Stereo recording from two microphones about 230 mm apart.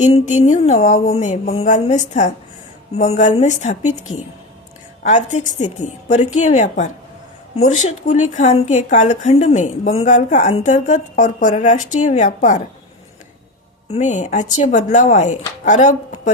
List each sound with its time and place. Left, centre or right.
0.0 s a woman's voice: left
5.0 s a woman's voice: left
13.9 s a woman's voice: left